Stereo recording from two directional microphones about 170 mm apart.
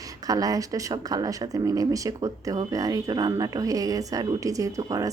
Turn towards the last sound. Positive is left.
turn(degrees=-20)  # may be behind; listen again after turning